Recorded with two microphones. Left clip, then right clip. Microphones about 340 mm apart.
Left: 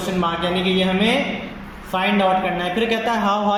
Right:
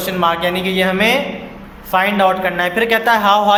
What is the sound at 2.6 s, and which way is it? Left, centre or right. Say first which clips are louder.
Speech: right 6 dB; right.